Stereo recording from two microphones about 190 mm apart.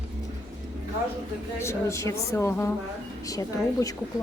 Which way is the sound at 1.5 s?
15° left (ahead or behind).